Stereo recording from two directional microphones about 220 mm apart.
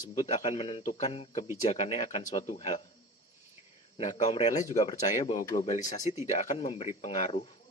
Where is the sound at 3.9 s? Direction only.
30° left (ahead or behind).